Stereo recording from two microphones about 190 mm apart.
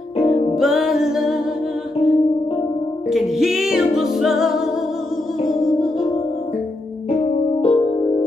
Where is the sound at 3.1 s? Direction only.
Centre (ahead or behind).